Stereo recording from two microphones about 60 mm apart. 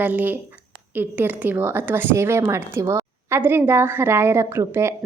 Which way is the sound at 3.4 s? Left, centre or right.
Right.